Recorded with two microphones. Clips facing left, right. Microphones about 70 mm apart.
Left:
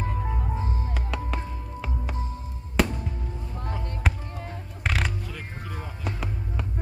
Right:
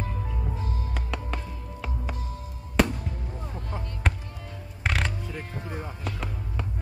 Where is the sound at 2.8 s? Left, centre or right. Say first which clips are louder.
Right 1 dB; centre.